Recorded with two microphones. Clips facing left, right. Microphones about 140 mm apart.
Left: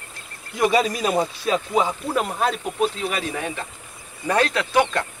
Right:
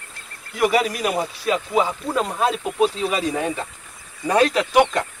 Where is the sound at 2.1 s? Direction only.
5° left (ahead or behind).